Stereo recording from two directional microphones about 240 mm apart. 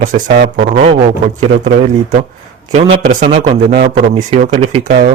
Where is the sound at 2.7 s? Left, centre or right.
Right.